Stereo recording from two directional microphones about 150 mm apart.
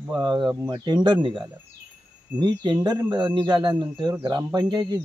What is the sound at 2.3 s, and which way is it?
Speech, 30° right (ahead or behind).